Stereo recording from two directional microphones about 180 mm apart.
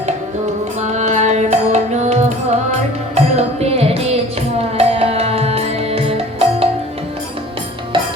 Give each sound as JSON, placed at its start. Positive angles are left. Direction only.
{"t": 0.8, "sound": "music", "side_deg": -40}
{"t": 7.9, "sound": "music", "side_deg": -30}